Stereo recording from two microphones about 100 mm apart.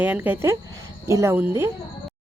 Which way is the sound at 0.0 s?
20° right (ahead or behind).